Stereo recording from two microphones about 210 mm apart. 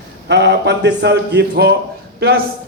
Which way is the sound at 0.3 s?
55° right (ahead or behind).